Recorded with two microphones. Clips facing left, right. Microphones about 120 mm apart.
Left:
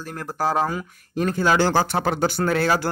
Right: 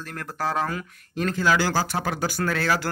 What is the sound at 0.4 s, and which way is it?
Speech, 30° left (ahead or behind).